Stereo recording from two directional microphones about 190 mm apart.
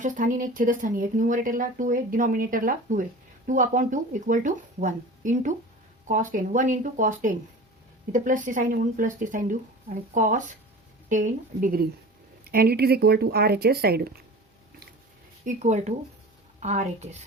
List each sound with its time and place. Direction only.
0.0 s a woman's voice: 45° right (ahead or behind)
15.4 s a woman's voice: 35° right (ahead or behind)